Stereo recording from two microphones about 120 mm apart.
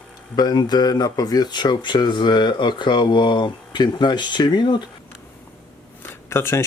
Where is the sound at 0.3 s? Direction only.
35° left (ahead or behind).